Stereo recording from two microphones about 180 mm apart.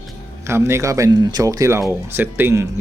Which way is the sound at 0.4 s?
15° right (ahead or behind).